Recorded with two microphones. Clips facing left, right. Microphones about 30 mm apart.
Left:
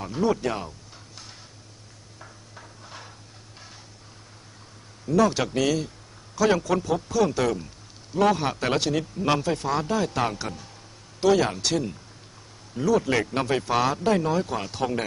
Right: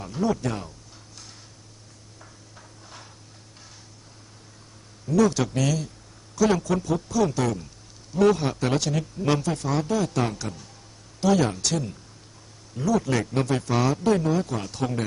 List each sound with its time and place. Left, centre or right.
0.0 s a man's voice: centre
2.1 s a sound: centre
5.1 s a man's voice: left